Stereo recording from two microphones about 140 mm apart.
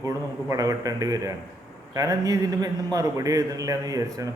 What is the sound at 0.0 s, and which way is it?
A man's voice, 25° right (ahead or behind).